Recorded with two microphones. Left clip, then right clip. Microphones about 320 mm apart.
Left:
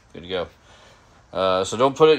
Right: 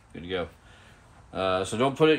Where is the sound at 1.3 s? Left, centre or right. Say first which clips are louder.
Left 6 dB; centre.